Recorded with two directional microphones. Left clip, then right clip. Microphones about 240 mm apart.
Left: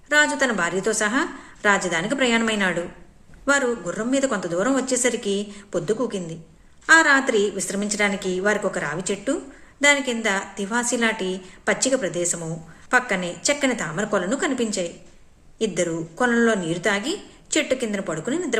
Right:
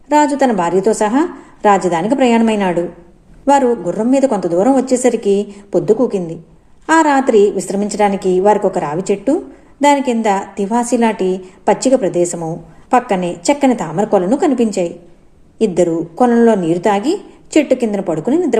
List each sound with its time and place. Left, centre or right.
0.1 s a woman's voice: centre
6.8 s a woman's voice: centre